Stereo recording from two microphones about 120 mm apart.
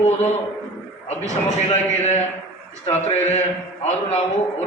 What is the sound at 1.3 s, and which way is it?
A man's voice, 75° left (ahead or behind).